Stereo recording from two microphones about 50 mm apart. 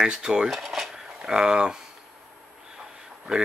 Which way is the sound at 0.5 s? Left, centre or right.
Centre.